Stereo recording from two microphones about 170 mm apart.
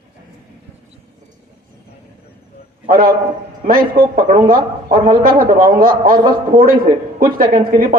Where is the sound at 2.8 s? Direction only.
55° right (ahead or behind).